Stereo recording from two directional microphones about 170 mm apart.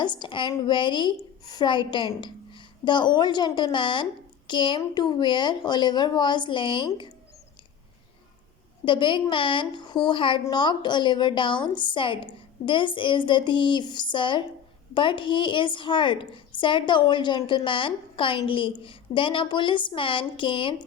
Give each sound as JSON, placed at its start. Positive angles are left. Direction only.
{"t": 0.0, "sound": "a woman's voice", "side_deg": 25}
{"t": 8.8, "sound": "a woman's voice", "side_deg": 30}